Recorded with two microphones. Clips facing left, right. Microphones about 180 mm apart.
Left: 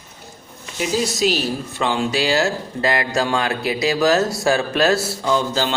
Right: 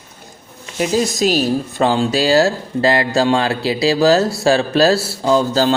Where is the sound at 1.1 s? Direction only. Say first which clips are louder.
Right 4 dB; 45° right (ahead or behind).